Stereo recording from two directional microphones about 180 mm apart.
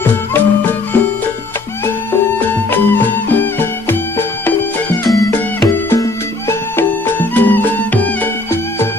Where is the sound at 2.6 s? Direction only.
10° left (ahead or behind).